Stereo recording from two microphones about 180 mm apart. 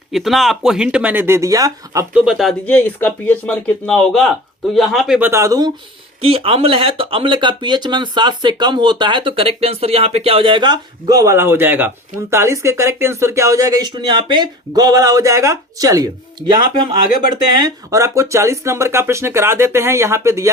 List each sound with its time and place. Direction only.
0.1 s speech: centre (ahead or behind); by 2.0 s 20° right (ahead or behind)
2.1 s speech: 5° right (ahead or behind)
5.3 s speech: 20° right (ahead or behind)
6.2 s speech: 30° right (ahead or behind); by 20.5 s 15° right (ahead or behind)